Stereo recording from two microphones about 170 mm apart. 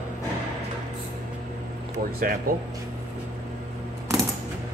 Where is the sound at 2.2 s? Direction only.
55° right (ahead or behind).